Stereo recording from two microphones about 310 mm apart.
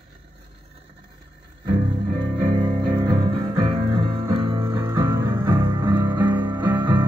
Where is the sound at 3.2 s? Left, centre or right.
Centre.